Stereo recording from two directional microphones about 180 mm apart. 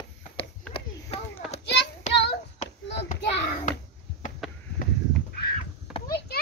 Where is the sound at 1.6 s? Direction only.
70° left (ahead or behind).